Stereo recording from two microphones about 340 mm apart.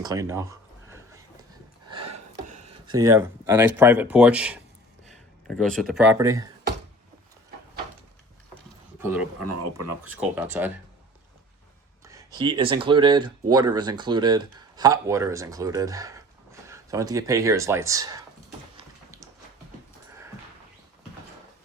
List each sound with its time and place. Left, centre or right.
0.0 s speech: centre
0.9 s a sound: centre
2.9 s speech: centre
5.7 s speech: centre
9.0 s speech: centre
9.5 s speech: right
10.2 s speech: centre
12.0 s speech: centre